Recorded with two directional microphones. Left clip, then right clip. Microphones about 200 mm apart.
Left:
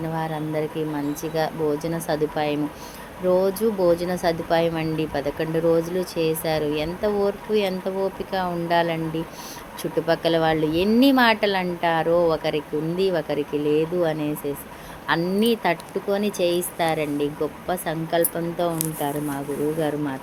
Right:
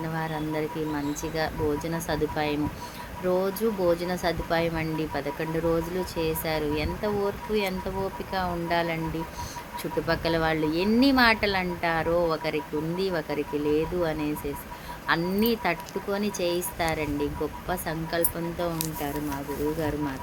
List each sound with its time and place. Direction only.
0.2 s speech: 10° left (ahead or behind)
10.1 s speech: 10° left (ahead or behind)